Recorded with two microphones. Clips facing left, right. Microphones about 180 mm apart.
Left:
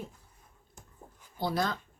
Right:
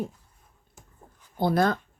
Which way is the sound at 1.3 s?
55° right (ahead or behind).